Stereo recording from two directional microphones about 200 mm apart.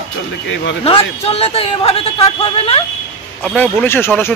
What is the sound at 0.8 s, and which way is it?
A man's voice, 30° left (ahead or behind).